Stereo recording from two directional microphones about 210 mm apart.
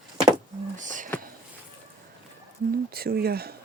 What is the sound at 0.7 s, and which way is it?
Speech, 35° right (ahead or behind).